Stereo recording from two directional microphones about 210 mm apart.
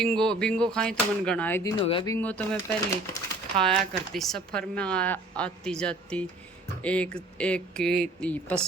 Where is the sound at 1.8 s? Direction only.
25° left (ahead or behind).